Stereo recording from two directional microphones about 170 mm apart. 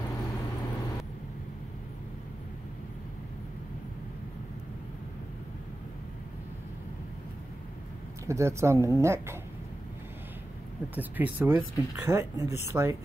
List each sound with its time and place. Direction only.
8.3 s speech: 15° right (ahead or behind)
11.0 s speech: 10° right (ahead or behind)